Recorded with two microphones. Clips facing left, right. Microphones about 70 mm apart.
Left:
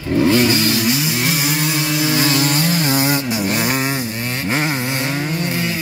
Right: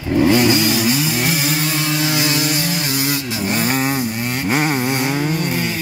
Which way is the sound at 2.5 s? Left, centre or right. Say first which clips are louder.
Left 3 dB; left.